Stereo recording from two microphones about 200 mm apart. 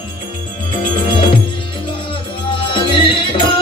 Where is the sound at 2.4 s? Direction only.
25° left (ahead or behind).